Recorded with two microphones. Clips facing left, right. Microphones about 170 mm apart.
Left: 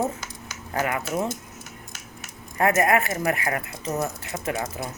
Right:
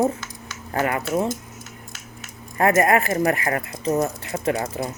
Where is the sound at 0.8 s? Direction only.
40° right (ahead or behind).